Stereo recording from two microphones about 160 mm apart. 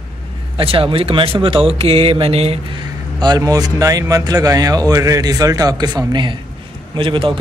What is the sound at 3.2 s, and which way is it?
A man's voice, 25° right (ahead or behind).